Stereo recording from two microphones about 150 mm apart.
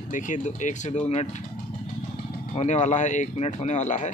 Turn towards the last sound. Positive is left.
turn(degrees=55)  # may be behind; listen again after turning